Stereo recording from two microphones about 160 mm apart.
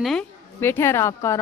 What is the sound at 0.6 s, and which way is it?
Speech, 15° left (ahead or behind).